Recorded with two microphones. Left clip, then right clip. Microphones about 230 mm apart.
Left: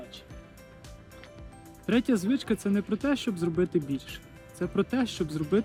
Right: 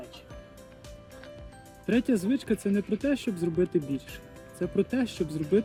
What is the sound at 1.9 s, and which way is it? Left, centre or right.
Speech, centre.